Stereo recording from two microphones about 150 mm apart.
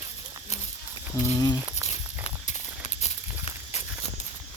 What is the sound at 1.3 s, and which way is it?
Speech, 25° left (ahead or behind).